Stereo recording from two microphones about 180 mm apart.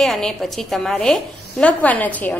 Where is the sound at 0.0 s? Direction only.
Centre (ahead or behind).